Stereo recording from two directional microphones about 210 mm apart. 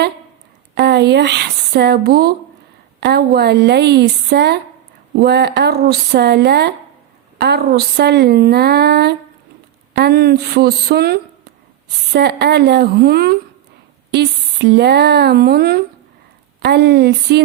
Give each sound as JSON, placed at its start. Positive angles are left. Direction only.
{"t": 0.8, "sound": "a woman's voice", "side_deg": -50}